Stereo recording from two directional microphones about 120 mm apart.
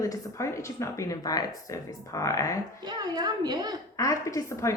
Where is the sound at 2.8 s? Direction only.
35° right (ahead or behind).